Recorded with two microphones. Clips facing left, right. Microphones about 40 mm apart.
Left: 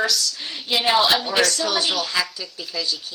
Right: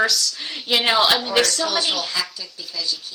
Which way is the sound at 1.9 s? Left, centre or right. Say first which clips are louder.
Left 2 dB; left.